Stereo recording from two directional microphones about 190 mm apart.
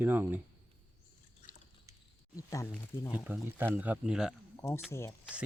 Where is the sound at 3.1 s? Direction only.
10° right (ahead or behind).